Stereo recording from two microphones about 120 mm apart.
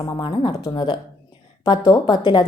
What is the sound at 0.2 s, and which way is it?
A woman's voice, 40° left (ahead or behind).